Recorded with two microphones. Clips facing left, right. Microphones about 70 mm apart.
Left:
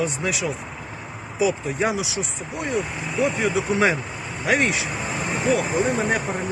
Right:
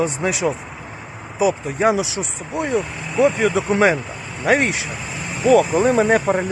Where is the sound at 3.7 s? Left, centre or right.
Right.